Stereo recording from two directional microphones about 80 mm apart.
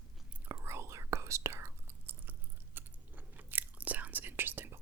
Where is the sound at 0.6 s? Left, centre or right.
Right.